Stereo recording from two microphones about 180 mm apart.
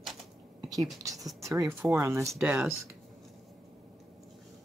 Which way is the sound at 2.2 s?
Centre (ahead or behind).